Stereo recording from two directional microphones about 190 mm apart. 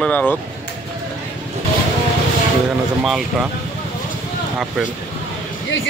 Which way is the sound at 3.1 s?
Centre (ahead or behind).